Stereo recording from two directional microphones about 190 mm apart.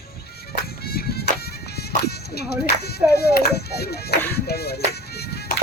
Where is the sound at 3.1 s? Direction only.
55° left (ahead or behind).